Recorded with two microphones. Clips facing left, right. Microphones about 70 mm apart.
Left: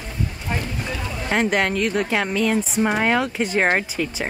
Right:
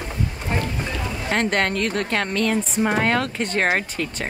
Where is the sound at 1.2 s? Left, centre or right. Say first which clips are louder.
Left 1 dB; centre.